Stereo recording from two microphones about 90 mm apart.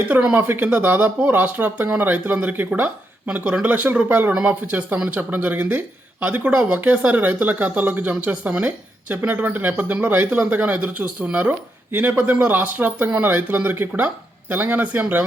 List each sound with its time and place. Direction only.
0.1 s speech: 15° right (ahead or behind)